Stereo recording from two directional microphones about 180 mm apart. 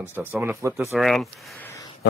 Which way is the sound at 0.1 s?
10° right (ahead or behind).